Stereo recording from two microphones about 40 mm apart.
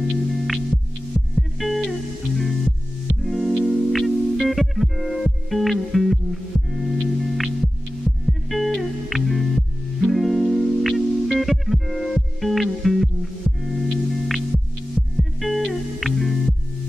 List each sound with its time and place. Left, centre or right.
0.3 s music: centre